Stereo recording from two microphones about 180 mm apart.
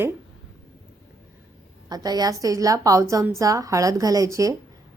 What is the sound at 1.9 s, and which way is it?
A woman's voice, 20° right (ahead or behind).